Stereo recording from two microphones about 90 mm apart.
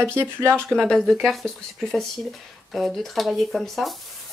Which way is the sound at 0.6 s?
5° left (ahead or behind).